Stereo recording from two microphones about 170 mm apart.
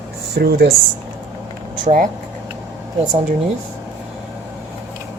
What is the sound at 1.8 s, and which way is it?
Speech, 50° right (ahead or behind).